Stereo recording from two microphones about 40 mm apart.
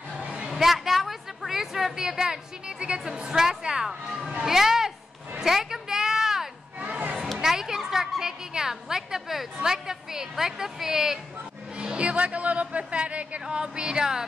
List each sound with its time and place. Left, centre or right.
0.5 s a woman's voice: centre
5.4 s a sound: centre
6.8 s a sound: right
7.4 s a child's voice: centre
11.8 s speech: right
13.6 s speech: right